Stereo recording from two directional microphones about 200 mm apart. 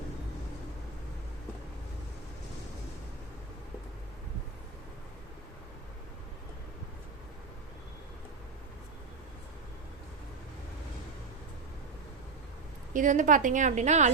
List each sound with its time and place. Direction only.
12.9 s a woman's voice: 40° right (ahead or behind)